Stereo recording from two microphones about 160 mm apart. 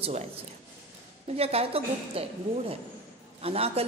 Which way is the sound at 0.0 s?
45° right (ahead or behind).